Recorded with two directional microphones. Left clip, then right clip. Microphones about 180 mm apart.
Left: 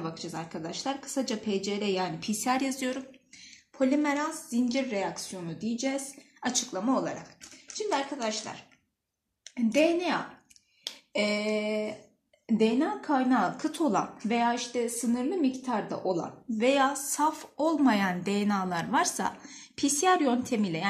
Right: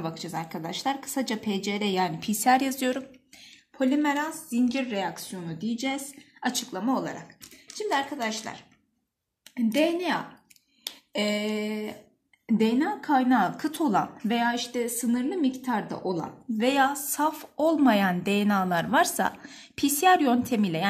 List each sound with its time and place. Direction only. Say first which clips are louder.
0.0 s a woman's voice: right 3 dB; 60° right (ahead or behind)
3.4 s a woman's voice: right 1 dB; 50° right (ahead or behind)
11.1 s a woman's voice: even; 55° right (ahead or behind)